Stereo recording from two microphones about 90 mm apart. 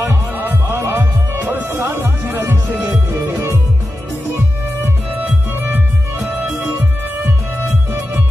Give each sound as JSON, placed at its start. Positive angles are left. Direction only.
{"t": 0.4, "sound": "music", "side_deg": -25}
{"t": 4.8, "sound": "music", "side_deg": -20}